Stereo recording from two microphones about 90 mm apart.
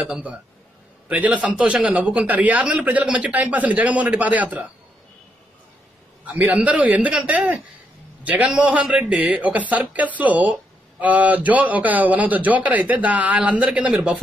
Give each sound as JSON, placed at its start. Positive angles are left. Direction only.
{"t": 0.0, "sound": "a man's voice", "side_deg": -15}
{"t": 6.2, "sound": "a man's voice", "side_deg": -15}